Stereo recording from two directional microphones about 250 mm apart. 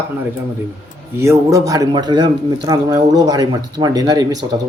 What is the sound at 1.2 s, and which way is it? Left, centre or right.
A man's voice, centre.